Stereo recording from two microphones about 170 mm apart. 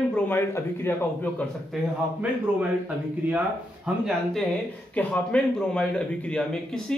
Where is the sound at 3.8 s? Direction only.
5° right (ahead or behind).